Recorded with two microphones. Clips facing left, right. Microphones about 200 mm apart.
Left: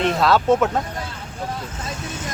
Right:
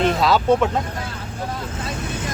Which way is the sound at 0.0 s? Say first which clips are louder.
Even; centre (ahead or behind).